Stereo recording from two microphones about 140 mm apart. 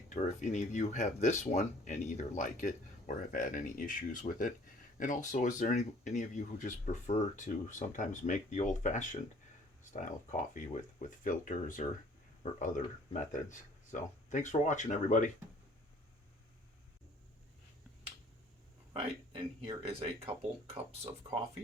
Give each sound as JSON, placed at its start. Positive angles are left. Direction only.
{"t": 0.1, "sound": "speech", "side_deg": 60}
{"t": 18.9, "sound": "speech", "side_deg": -40}
{"t": 21.2, "sound": "speech", "side_deg": -35}